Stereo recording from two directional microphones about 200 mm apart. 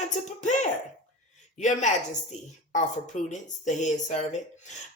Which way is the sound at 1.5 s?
35° left (ahead or behind).